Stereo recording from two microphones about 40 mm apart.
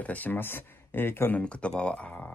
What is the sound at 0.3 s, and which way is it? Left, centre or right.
Speech, left.